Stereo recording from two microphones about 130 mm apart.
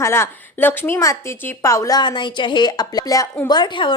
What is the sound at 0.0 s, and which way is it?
A woman's voice, 20° left (ahead or behind).